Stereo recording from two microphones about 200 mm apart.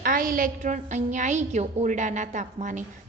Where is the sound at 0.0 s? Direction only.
45° right (ahead or behind).